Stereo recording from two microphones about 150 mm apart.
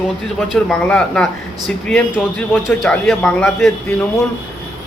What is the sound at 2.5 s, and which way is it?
A man's voice, 5° left (ahead or behind).